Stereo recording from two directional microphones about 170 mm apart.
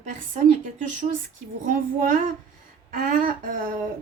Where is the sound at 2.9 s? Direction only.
60° right (ahead or behind).